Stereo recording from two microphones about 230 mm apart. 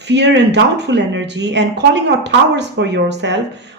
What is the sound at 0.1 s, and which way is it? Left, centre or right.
Speech, right.